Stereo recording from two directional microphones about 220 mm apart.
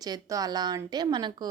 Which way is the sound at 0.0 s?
15° right (ahead or behind).